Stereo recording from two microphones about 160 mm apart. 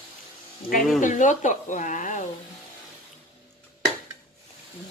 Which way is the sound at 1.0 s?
50° left (ahead or behind).